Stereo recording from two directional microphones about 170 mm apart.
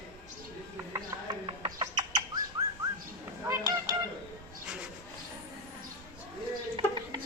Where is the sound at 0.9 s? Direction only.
25° right (ahead or behind).